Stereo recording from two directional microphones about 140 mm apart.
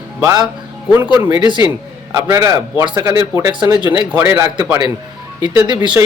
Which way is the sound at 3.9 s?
15° right (ahead or behind).